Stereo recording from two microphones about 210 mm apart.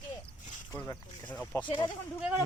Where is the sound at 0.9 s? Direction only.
10° left (ahead or behind).